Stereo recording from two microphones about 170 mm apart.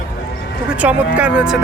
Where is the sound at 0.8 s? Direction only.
10° right (ahead or behind).